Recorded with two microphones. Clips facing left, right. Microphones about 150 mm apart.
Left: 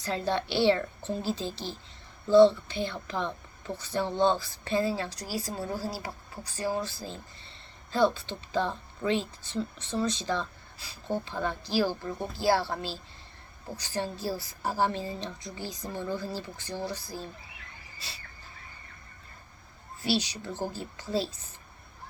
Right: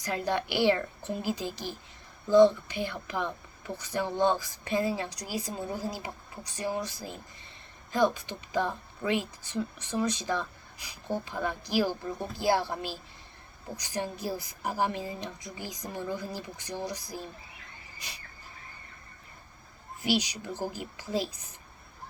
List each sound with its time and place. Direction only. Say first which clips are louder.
0.0 s speech: left 1 dB; 10° right (ahead or behind)
20.0 s speech: even; 15° right (ahead or behind)